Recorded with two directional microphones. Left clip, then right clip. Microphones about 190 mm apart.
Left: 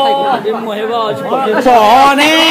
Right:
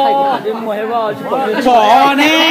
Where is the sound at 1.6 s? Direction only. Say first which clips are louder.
Left 2 dB; 10° left (ahead or behind).